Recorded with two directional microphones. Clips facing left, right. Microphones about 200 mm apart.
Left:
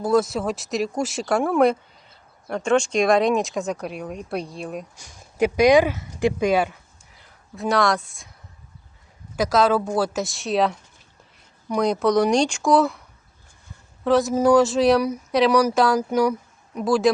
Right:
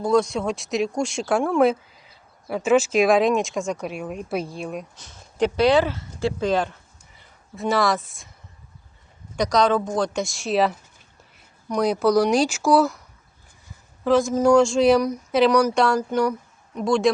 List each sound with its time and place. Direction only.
0.0 s speech: 5° left (ahead or behind)
4.9 s speech: 10° left (ahead or behind)
7.5 s speech: centre (ahead or behind)
9.3 s speech: 5° left (ahead or behind)
11.8 s speech: 5° right (ahead or behind)
14.0 s speech: centre (ahead or behind)